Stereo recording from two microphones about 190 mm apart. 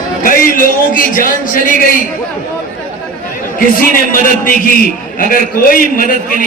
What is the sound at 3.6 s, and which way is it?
A man's voice, 50° left (ahead or behind).